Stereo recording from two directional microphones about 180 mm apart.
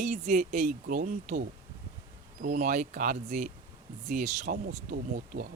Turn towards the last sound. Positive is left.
turn(degrees=-55)  # may be behind; listen again after turning